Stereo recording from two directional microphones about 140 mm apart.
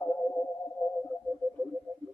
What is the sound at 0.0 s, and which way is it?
Music, 10° left (ahead or behind).